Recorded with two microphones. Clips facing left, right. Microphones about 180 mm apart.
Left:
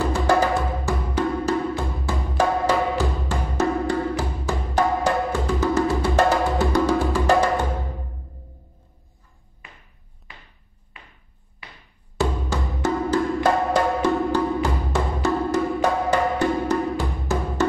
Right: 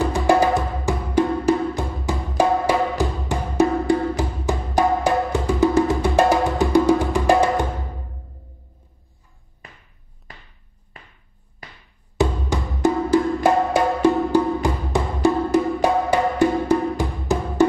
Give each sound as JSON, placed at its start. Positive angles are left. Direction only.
{"t": 0.1, "sound": "music", "side_deg": -15}
{"t": 10.9, "sound": "a sound", "side_deg": -40}
{"t": 11.6, "sound": "music", "side_deg": -40}
{"t": 12.2, "sound": "music", "side_deg": -15}